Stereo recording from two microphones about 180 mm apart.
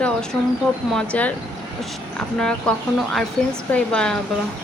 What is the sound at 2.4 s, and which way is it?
Speech, 5° left (ahead or behind).